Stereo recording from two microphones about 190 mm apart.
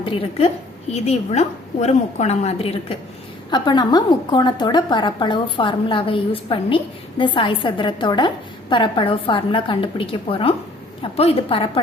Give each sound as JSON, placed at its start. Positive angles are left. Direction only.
{"t": 0.0, "sound": "a woman's voice", "side_deg": 30}